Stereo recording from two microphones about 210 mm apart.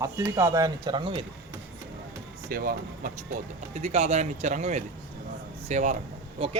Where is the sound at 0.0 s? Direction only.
15° right (ahead or behind).